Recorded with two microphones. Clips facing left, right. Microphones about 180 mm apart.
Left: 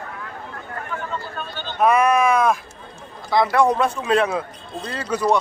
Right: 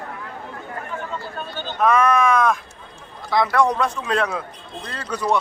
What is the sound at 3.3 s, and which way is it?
A man's voice, 5° left (ahead or behind).